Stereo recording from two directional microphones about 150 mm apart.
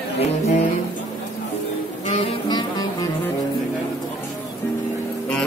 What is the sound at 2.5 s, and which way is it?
Music, 30° left (ahead or behind).